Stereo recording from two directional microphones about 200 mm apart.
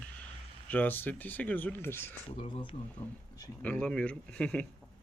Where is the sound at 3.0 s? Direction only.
10° left (ahead or behind).